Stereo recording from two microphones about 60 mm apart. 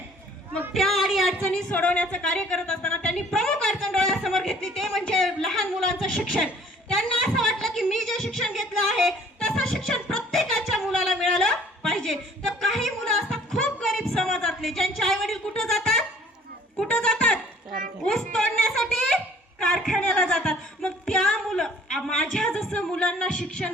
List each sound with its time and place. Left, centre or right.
0.7 s a sound: centre
1.7 s a woman's voice: left; by 20.0 s centre
21.5 s a woman's voice: centre